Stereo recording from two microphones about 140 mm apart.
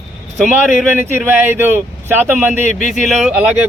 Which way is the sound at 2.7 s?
60° left (ahead or behind).